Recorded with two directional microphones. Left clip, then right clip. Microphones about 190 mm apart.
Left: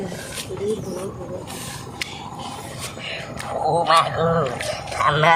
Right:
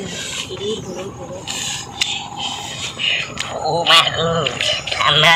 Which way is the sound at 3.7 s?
10° left (ahead or behind).